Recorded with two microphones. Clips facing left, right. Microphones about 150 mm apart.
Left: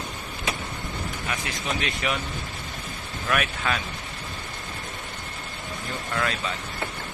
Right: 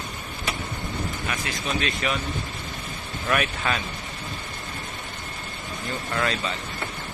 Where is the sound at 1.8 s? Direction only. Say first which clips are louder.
Right 2 dB; 15° left (ahead or behind).